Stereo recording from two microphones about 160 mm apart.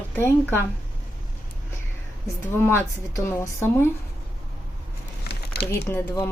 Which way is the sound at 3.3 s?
15° left (ahead or behind).